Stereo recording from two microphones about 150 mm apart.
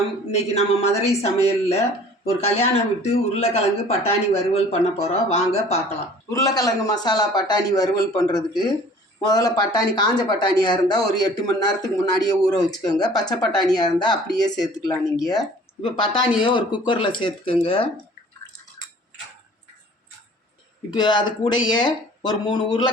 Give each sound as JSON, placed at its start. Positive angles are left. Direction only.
{"t": 0.3, "sound": "speech", "side_deg": 45}
{"t": 6.3, "sound": "speech", "side_deg": 25}
{"t": 20.9, "sound": "speech", "side_deg": 30}